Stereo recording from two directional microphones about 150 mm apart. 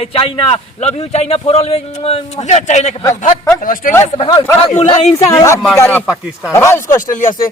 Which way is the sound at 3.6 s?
65° left (ahead or behind).